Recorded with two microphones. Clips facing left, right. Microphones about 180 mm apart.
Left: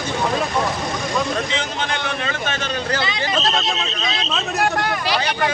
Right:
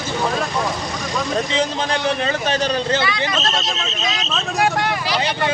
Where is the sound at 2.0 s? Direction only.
35° right (ahead or behind).